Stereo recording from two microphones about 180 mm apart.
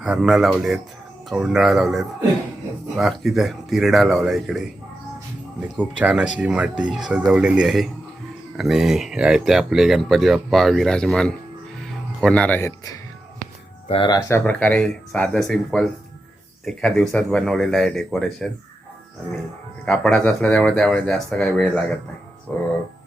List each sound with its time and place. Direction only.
0.0 s speech: centre (ahead or behind)
5.7 s speech: 10° right (ahead or behind)
11.8 s music: centre (ahead or behind)
13.8 s speech: 30° left (ahead or behind)
14.3 s speech: 10° left (ahead or behind)
19.8 s speech: centre (ahead or behind)